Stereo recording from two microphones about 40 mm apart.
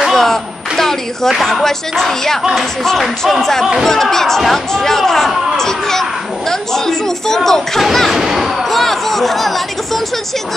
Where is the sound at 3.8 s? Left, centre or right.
Centre.